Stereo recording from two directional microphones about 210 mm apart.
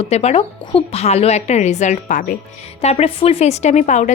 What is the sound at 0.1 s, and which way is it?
Speech, 30° left (ahead or behind).